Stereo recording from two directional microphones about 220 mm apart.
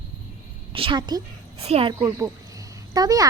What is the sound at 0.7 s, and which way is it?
A woman's voice, 25° right (ahead or behind).